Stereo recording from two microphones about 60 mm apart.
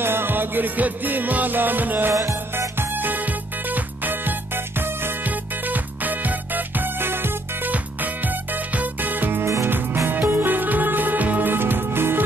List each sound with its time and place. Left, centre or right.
0.0 s music: right
2.1 s music: right